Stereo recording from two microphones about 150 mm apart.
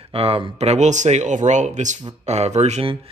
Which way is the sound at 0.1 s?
40° right (ahead or behind).